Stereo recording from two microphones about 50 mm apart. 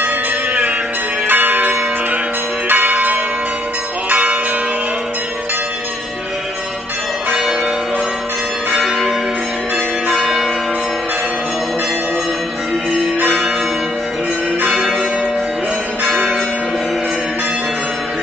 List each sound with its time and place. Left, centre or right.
1.2 s change ringing: right
4.1 s church bell: right
8.7 s change ringing: centre
10.1 s change ringing: centre
14.6 s change ringing: centre